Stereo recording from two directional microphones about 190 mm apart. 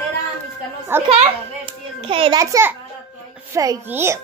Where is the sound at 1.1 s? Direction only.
30° right (ahead or behind).